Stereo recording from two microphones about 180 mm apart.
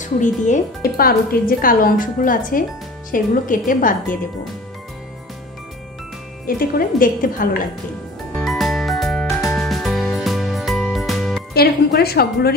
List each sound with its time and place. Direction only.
0.0 s a woman's voice: 45° left (ahead or behind)
6.4 s a woman's voice: 55° left (ahead or behind)
8.4 s music: centre (ahead or behind)
11.5 s a woman's voice: 60° left (ahead or behind)